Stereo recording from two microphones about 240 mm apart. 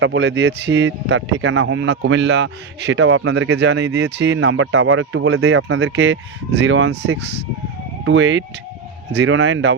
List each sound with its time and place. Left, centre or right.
0.0 s speech: right